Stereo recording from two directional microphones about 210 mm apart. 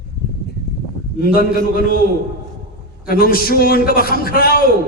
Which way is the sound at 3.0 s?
45° left (ahead or behind).